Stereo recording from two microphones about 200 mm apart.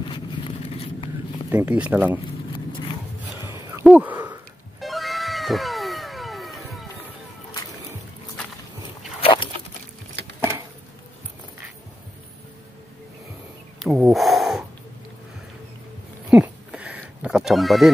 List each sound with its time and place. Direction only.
0.1 s vehicle: 25° left (ahead or behind)
1.5 s speech: 10° right (ahead or behind)
3.8 s a sound: 10° right (ahead or behind)
4.7 s cat: centre (ahead or behind)
9.2 s pig: 25° left (ahead or behind)
13.8 s snort: 5° right (ahead or behind)
16.3 s neigh: 5° right (ahead or behind)